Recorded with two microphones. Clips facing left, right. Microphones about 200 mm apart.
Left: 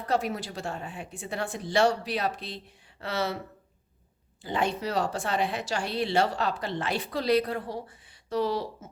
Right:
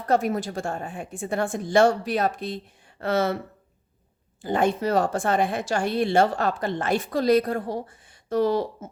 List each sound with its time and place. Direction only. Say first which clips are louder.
0.1 s speech: right 6 dB; 50° right (ahead or behind)
4.4 s speech: right 6 dB; 50° right (ahead or behind)